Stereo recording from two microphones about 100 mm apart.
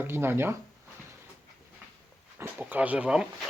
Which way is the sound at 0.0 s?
20° right (ahead or behind).